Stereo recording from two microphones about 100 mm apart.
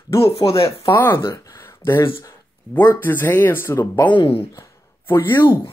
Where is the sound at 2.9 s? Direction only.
20° left (ahead or behind).